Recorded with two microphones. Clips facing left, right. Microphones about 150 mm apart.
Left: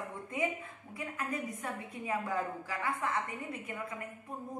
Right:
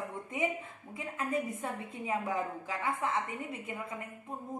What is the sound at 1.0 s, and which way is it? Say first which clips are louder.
A woman's voice: right 3 dB; 25° right (ahead or behind).